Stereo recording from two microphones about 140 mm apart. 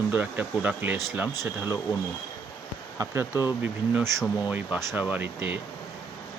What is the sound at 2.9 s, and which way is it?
Speech, 20° right (ahead or behind).